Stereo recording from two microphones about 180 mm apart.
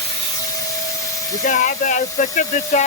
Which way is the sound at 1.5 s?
45° left (ahead or behind).